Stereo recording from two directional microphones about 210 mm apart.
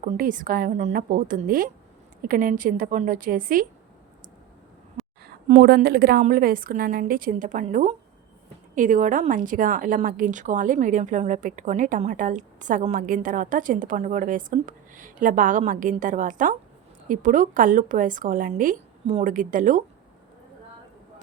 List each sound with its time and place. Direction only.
0.0 s a woman's voice: 40° right (ahead or behind)
5.0 s a sound: centre (ahead or behind)
5.5 s a woman's voice: 50° right (ahead or behind)